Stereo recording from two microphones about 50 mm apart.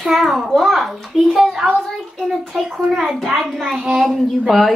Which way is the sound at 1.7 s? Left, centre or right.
Centre.